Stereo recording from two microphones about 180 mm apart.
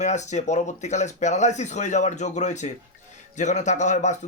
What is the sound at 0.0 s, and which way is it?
A man's voice, 40° left (ahead or behind).